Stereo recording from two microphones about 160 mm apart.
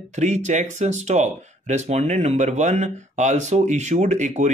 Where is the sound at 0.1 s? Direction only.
45° right (ahead or behind).